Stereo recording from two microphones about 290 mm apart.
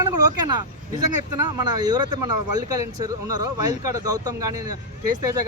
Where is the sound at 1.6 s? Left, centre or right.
Centre.